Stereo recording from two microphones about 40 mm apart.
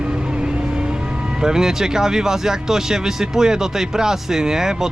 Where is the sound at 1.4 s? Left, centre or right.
Centre.